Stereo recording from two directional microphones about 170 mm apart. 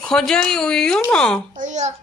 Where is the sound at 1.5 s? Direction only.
50° right (ahead or behind).